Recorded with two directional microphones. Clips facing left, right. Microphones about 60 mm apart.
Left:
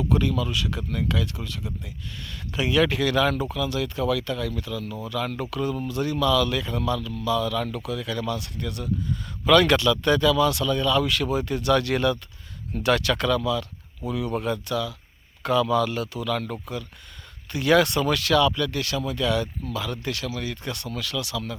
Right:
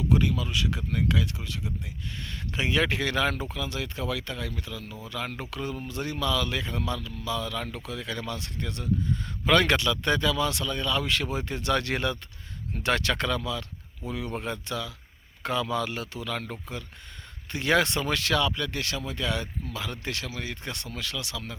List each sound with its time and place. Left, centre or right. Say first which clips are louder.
0.1 s speech: left 2 dB; centre